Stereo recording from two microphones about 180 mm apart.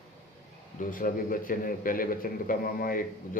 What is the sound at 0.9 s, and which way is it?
A man's voice, 50° left (ahead or behind).